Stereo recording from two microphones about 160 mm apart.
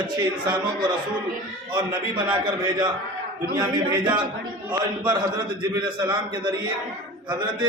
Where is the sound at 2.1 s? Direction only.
30° right (ahead or behind).